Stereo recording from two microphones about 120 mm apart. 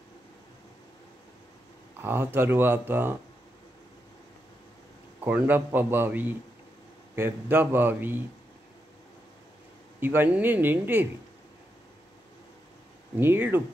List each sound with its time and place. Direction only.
2.0 s speech: 15° right (ahead or behind)
5.2 s speech: 15° right (ahead or behind)
9.9 s speech: 15° right (ahead or behind)
13.1 s speech: 20° right (ahead or behind)